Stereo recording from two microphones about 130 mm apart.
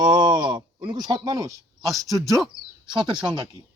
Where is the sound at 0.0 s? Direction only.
35° right (ahead or behind).